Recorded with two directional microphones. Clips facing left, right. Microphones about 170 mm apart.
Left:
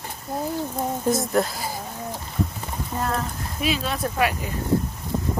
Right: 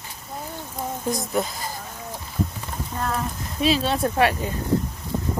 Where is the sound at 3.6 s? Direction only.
30° right (ahead or behind).